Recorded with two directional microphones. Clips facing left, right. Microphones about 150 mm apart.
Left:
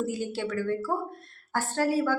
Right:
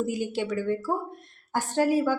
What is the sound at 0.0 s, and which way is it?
A woman's voice, 15° right (ahead or behind).